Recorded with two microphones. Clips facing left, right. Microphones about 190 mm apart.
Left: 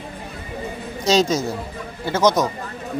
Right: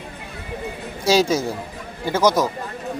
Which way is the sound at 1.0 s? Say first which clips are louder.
Even; 10° right (ahead or behind).